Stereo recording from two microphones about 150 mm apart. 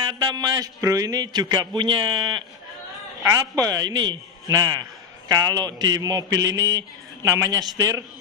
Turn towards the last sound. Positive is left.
turn(degrees=-25)  # may be behind; listen again after turning